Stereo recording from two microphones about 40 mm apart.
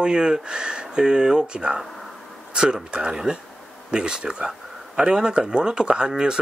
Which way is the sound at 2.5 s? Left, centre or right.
Right.